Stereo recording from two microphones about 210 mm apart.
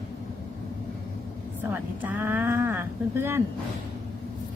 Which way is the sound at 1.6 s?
10° right (ahead or behind).